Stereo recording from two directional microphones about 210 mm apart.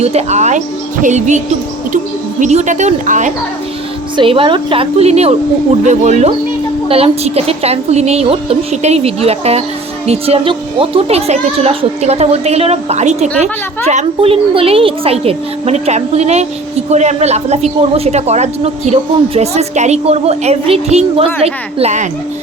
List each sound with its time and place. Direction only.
0.0 s a woman's voice: 30° right (ahead or behind)
2.4 s a woman's voice: 35° right (ahead or behind)
4.2 s a woman's voice: 25° right (ahead or behind)